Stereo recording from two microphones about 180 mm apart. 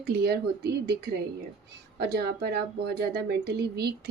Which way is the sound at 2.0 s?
60° right (ahead or behind).